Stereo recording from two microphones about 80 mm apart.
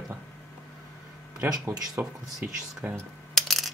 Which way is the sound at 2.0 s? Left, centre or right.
Right.